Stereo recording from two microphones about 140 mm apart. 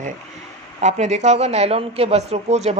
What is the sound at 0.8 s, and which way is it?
A woman's voice, 55° right (ahead or behind).